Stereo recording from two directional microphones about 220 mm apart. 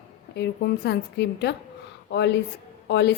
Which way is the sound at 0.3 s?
50° left (ahead or behind).